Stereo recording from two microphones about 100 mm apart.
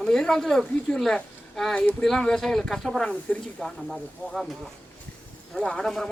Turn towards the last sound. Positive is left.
turn(degrees=5)  # may be behind; listen again after turning